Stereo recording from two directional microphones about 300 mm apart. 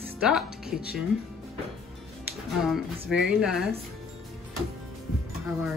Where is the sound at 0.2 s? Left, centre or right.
Centre.